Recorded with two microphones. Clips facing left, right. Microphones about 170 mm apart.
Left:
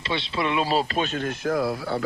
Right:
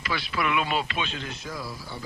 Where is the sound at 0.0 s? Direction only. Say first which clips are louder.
Left 2 dB; 25° left (ahead or behind).